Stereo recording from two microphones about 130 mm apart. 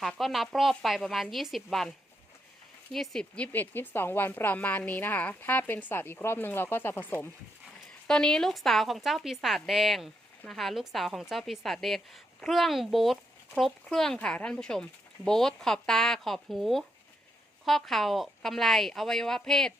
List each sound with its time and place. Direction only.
0.0 s speech: centre (ahead or behind)
2.9 s speech: 5° left (ahead or behind)
8.0 s speech: 5° left (ahead or behind)